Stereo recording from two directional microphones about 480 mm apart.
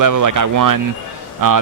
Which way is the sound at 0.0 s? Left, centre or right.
Right.